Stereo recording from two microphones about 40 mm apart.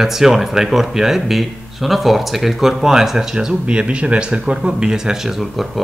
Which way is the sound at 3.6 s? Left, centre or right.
Right.